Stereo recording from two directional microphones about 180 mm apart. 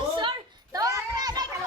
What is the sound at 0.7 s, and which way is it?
Children playing, 20° right (ahead or behind).